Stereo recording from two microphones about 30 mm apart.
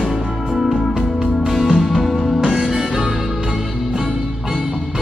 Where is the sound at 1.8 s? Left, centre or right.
Centre.